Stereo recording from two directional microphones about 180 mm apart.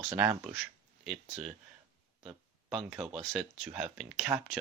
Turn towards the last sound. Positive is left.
turn(degrees=-5)  # may be behind; listen again after turning